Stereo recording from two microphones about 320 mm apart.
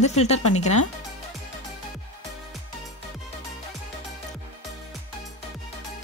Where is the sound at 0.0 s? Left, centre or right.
Centre.